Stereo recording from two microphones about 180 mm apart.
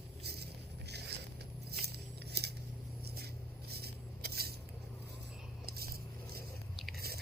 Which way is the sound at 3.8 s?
60° right (ahead or behind).